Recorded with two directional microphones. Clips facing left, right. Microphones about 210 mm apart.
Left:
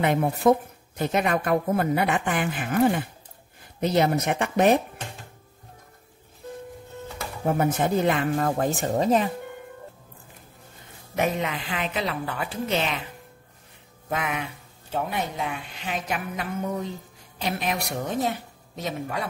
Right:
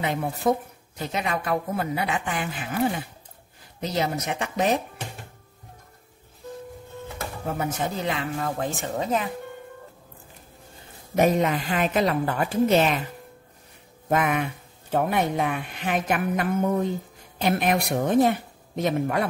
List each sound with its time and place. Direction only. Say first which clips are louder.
0.4 s speech: left 4 dB; 65° left (ahead or behind)
0.9 s a woman's voice: left 4 dB; 55° left (ahead or behind)
7.5 s a woman's voice: left 6 dB; 55° left (ahead or behind); by 9.3 s 35° left (ahead or behind)
11.1 s a woman's voice: right 5 dB; 40° right (ahead or behind)
14.0 s speech: right 6 dB; 50° right (ahead or behind)